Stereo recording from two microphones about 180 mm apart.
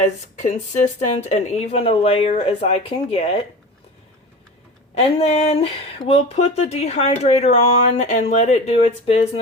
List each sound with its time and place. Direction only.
0.0 s speech: 40° left (ahead or behind)
4.9 s speech: 35° left (ahead or behind)